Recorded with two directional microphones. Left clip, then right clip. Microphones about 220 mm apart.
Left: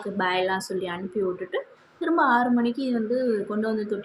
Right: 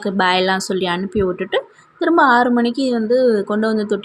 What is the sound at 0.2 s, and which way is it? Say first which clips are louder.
Speech: right 8 dB; 40° right (ahead or behind).